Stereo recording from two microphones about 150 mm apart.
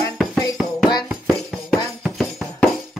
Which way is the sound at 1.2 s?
25° left (ahead or behind).